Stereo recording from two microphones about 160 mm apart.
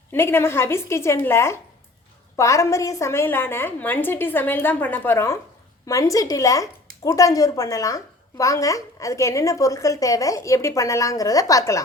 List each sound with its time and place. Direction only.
0.1 s a woman's voice: 15° left (ahead or behind)